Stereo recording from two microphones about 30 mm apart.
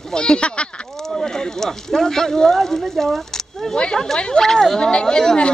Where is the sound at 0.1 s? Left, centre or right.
Left.